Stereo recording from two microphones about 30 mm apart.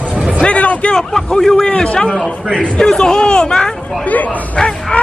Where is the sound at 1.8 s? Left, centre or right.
Left.